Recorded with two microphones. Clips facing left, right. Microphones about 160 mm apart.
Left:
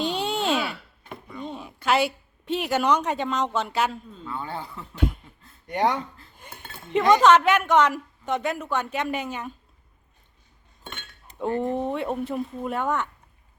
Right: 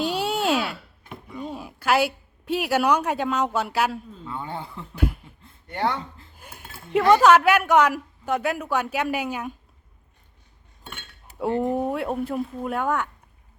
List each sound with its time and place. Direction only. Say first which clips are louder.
0.0 s a sound: right 2 dB; 5° right (ahead or behind)
4.3 s speech: even; 20° right (ahead or behind)
4.9 s a sound: even; 5° right (ahead or behind)
5.6 s speech: left 2 dB; 15° left (ahead or behind)
6.3 s chink: even; 5° right (ahead or behind)
7.1 s speech: right 1 dB; 10° right (ahead or behind)
10.8 s speech: left 1 dB; 10° right (ahead or behind)